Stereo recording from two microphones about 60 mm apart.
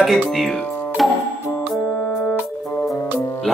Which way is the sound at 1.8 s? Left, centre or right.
Left.